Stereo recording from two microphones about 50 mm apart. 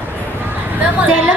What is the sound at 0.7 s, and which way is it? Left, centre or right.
Speech, right.